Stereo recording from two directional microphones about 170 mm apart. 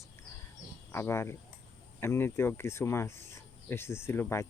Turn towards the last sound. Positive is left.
turn(degrees=15)  # may be behind; listen again after turning